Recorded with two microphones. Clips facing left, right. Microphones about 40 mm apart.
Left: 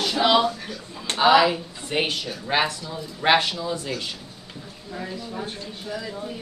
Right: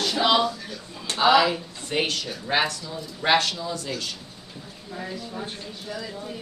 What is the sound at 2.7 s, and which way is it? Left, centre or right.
Speech, left.